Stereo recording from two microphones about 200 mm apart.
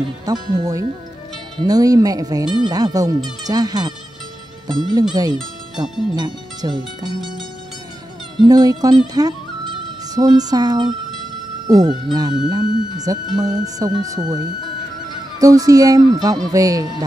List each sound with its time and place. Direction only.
0.6 s speech: 20° right (ahead or behind)
8.4 s speech: 20° right (ahead or behind)
15.3 s speech: 15° right (ahead or behind)